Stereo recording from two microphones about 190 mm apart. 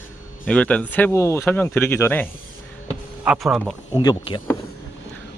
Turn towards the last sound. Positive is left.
turn(degrees=25)  # may be behind; listen again after turning